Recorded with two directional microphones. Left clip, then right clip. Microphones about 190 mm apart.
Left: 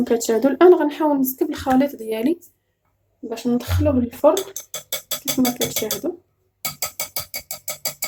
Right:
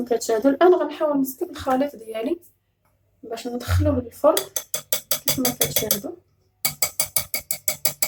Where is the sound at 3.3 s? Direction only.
40° left (ahead or behind).